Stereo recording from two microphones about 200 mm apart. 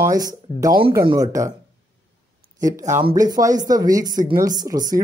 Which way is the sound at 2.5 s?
15° right (ahead or behind).